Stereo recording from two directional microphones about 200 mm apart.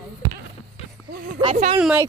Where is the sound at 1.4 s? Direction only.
35° right (ahead or behind).